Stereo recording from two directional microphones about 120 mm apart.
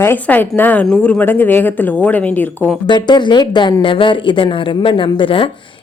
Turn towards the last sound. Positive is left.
turn(degrees=45)  # may be behind; listen again after turning